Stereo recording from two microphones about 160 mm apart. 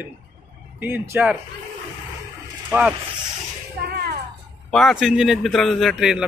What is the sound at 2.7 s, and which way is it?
Speech, 10° right (ahead or behind).